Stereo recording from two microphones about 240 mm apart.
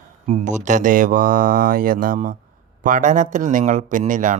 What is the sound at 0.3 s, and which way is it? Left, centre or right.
Speech, right.